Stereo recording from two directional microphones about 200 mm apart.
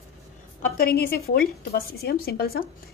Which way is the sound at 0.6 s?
50° left (ahead or behind).